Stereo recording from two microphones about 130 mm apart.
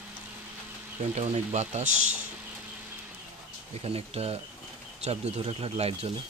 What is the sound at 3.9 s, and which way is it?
Speech, 50° right (ahead or behind).